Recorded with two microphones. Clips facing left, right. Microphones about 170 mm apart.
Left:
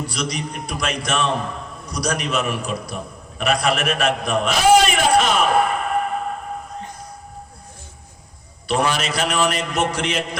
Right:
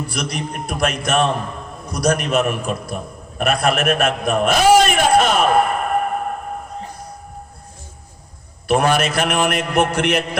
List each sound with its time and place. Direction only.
0.0 s a man's voice: 55° right (ahead or behind)
5.1 s a sound: 55° right (ahead or behind)
8.6 s a man's voice: 55° right (ahead or behind)